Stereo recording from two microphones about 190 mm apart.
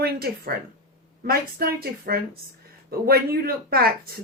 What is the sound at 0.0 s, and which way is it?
A woman's voice, 55° right (ahead or behind).